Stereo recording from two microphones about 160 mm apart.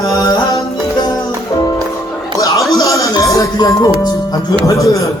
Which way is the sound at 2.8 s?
20° left (ahead or behind).